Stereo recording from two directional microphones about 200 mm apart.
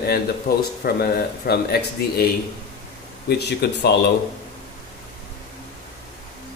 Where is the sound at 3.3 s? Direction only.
55° left (ahead or behind).